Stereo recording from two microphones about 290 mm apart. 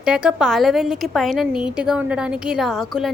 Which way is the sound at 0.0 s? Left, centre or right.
Centre.